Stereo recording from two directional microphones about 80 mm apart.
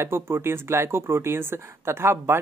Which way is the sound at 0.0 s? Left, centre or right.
Right.